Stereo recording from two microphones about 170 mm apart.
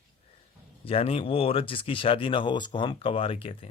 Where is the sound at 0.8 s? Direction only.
35° left (ahead or behind).